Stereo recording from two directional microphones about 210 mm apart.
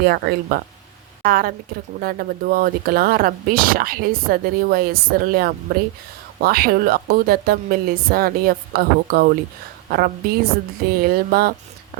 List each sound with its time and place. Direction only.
0.0 s speech: 45° right (ahead or behind)